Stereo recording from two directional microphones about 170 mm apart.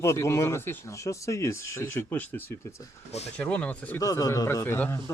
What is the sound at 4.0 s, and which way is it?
Speech, 20° left (ahead or behind).